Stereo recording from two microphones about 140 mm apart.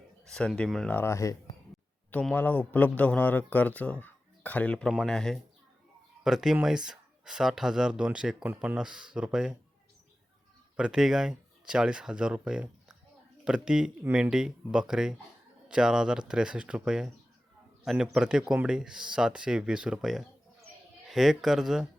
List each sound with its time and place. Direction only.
0.3 s speech: 5° left (ahead or behind)
0.9 s a man's voice: 20° left (ahead or behind); by 9.6 s 5° right (ahead or behind)
10.8 s speech: 5° right (ahead or behind)